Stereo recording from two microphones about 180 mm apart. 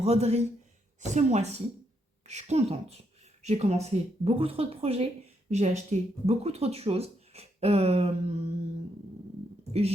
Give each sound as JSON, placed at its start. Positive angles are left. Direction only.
{"t": 0.0, "sound": "speech", "side_deg": -35}